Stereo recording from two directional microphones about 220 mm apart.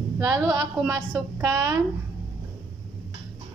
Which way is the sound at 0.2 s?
15° right (ahead or behind).